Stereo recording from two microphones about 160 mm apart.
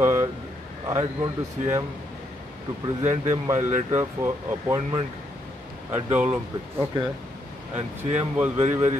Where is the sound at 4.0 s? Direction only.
15° right (ahead or behind).